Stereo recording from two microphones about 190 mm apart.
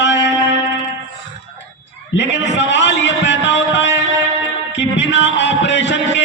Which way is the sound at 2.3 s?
70° left (ahead or behind).